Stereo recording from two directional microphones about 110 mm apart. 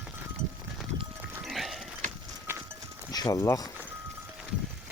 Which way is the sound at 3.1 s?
35° left (ahead or behind).